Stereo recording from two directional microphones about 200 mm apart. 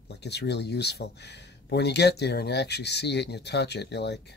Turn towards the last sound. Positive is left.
turn(degrees=55)  # may be behind; listen again after turning